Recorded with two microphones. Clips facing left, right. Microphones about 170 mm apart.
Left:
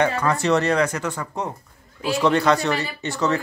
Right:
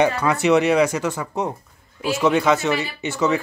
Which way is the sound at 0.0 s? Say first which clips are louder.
Right 2 dB; 10° right (ahead or behind).